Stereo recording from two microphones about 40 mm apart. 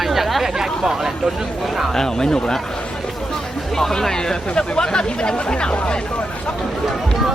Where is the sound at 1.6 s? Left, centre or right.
Centre.